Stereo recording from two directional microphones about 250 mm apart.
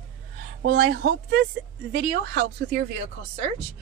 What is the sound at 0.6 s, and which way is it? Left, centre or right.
Speech, right.